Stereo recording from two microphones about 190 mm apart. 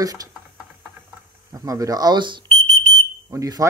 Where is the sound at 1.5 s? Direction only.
20° right (ahead or behind).